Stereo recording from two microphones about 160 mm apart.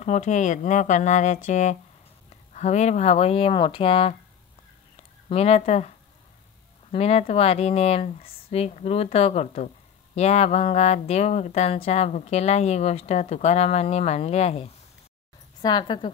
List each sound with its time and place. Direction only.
0.0 s speech: 50° left (ahead or behind)
4.9 s a sound: 40° left (ahead or behind)
6.9 s speech: 40° left (ahead or behind)
15.6 s a woman's voice: 30° left (ahead or behind)